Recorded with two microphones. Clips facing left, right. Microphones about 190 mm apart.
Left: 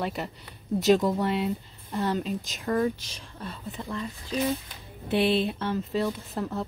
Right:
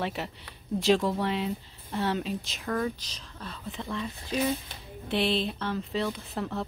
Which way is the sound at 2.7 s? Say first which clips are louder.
Left 4 dB; 10° left (ahead or behind).